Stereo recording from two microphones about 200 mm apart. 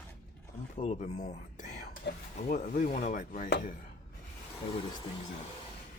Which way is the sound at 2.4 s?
40° left (ahead or behind).